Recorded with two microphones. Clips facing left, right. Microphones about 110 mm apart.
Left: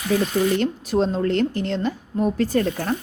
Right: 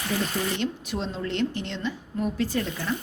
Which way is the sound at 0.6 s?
40° left (ahead or behind).